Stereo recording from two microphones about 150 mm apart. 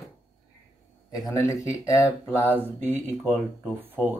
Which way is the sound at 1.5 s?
20° left (ahead or behind).